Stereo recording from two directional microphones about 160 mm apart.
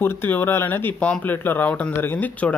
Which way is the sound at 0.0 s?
15° left (ahead or behind).